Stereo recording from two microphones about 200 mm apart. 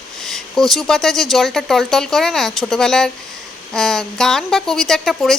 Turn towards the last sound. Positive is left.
turn(degrees=0)  # may be behind; listen again after turning